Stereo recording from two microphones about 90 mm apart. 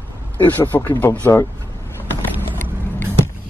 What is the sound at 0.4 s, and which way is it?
Speech, 20° left (ahead or behind).